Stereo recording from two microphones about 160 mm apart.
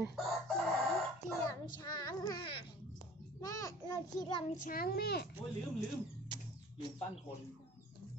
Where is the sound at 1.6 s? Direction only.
25° left (ahead or behind).